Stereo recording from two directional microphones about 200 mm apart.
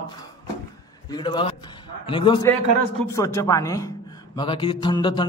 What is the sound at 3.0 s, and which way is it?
A man's voice, 15° left (ahead or behind).